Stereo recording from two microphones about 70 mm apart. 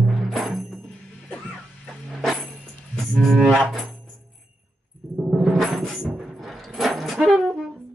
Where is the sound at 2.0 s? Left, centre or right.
Centre.